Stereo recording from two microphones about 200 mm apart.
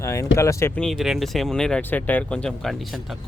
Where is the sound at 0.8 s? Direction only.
Centre (ahead or behind).